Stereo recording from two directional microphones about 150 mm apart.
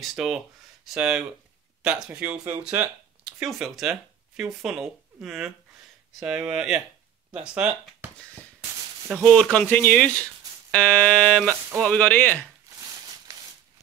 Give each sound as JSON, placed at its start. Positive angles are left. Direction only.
{"t": 0.0, "sound": "fire alarm", "side_deg": 0}
{"t": 1.8, "sound": "speech", "side_deg": -5}
{"t": 6.1, "sound": "fire alarm", "side_deg": -5}
{"t": 7.4, "sound": "speech", "side_deg": -5}
{"t": 9.1, "sound": "speech", "side_deg": 0}
{"t": 10.7, "sound": "fire alarm", "side_deg": 5}
{"t": 11.4, "sound": "speech", "side_deg": -20}
{"t": 11.9, "sound": "speech", "side_deg": 10}